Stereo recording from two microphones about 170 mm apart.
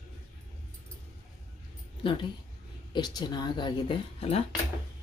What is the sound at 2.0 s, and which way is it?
A woman's voice, 30° left (ahead or behind).